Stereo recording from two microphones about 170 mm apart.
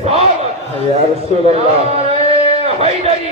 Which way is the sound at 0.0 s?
40° right (ahead or behind).